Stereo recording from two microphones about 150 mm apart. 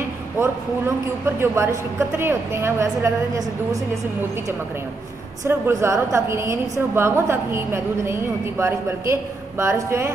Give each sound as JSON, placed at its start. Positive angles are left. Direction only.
{"t": 0.4, "sound": "a woman's voice", "side_deg": -15}
{"t": 5.4, "sound": "a woman's voice", "side_deg": -20}